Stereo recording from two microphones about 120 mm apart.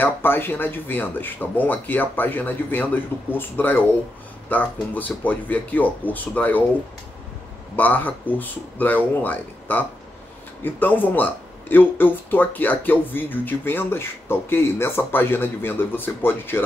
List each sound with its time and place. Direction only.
0.0 s speech: 15° left (ahead or behind)
7.7 s speech: 15° left (ahead or behind)